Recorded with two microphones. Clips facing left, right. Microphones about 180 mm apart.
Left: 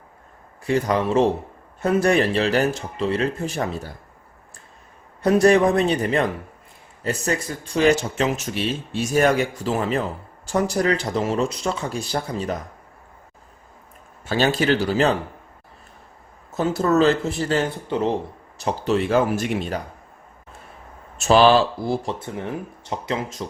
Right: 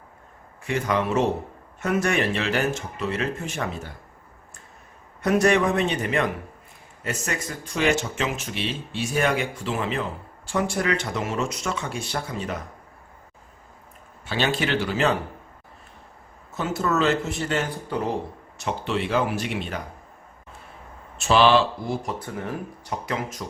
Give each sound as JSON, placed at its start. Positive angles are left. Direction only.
{"t": 0.6, "sound": "speech", "side_deg": 35}
{"t": 5.2, "sound": "speech", "side_deg": 35}
{"t": 14.3, "sound": "speech", "side_deg": 40}
{"t": 16.6, "sound": "speech", "side_deg": 35}
{"t": 21.2, "sound": "speech", "side_deg": 40}